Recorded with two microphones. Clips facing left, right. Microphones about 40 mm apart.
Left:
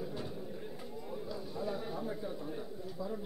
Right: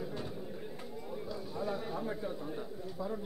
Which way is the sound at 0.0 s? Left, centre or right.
Centre.